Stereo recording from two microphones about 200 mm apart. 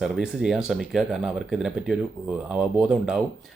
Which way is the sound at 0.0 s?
5° right (ahead or behind).